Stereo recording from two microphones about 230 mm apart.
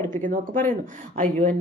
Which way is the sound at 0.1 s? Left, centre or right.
Right.